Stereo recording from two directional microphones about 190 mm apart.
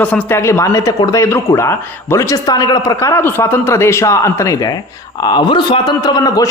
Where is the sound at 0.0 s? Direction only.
10° left (ahead or behind).